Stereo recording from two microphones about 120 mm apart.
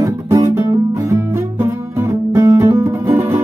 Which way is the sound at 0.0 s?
25° right (ahead or behind).